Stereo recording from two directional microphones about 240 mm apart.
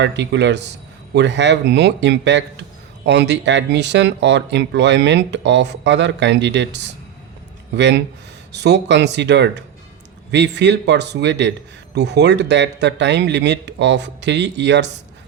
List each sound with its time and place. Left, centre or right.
0.0 s speech: right